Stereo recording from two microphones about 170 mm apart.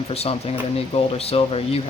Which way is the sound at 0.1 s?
35° left (ahead or behind).